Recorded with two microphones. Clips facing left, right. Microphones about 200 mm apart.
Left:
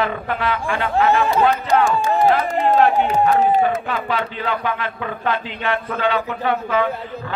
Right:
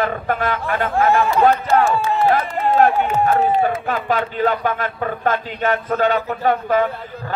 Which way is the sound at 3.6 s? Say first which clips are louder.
Even; 45° right (ahead or behind).